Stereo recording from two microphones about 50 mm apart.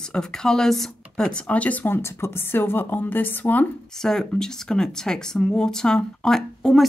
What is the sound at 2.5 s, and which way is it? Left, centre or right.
Speech, left.